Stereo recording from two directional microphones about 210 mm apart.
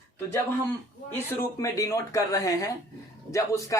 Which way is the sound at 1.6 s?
15° left (ahead or behind).